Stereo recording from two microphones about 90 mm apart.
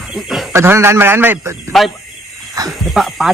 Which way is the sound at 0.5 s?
30° right (ahead or behind).